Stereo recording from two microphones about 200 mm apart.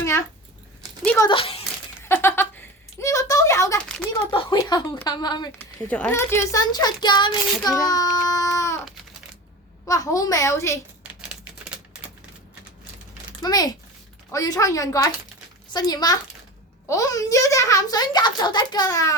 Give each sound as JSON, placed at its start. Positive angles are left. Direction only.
{"t": 0.0, "sound": "keys jangling", "side_deg": 15}
{"t": 1.0, "sound": "a child's voice", "side_deg": 10}
{"t": 1.3, "sound": "speech", "side_deg": 25}
{"t": 2.0, "sound": "a sound", "side_deg": 10}
{"t": 4.3, "sound": "speech", "side_deg": 25}
{"t": 5.5, "sound": "speech", "side_deg": 10}
{"t": 9.8, "sound": "a child's voice", "side_deg": 15}
{"t": 11.0, "sound": "typewriter", "side_deg": -5}
{"t": 13.4, "sound": "a child's voice", "side_deg": 20}